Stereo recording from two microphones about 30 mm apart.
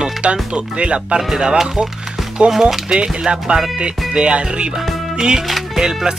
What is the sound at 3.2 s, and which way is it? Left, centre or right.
Speech, right.